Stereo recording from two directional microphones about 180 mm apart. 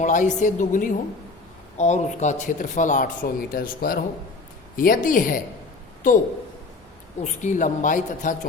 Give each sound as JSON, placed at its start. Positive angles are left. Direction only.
{"t": 0.0, "sound": "speech", "side_deg": 45}